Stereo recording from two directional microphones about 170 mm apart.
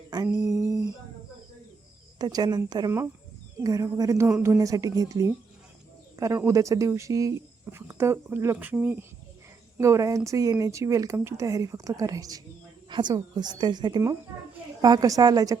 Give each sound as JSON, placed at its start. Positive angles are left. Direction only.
{"t": 0.1, "sound": "a sound", "side_deg": -20}
{"t": 0.7, "sound": "humming", "side_deg": -20}
{"t": 2.1, "sound": "a woman's voice", "side_deg": -25}